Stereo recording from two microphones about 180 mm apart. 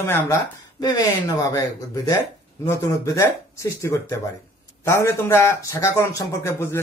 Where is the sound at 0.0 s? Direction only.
15° left (ahead or behind).